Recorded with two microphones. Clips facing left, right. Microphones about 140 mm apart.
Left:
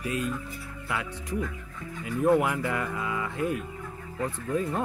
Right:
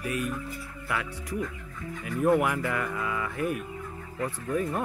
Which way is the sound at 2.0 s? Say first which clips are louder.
Left 1 dB; 20° left (ahead or behind).